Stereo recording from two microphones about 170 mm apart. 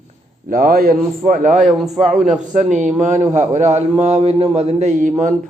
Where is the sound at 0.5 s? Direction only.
60° right (ahead or behind).